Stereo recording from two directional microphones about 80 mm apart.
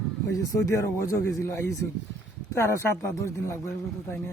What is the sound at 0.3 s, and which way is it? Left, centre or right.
Speech, left.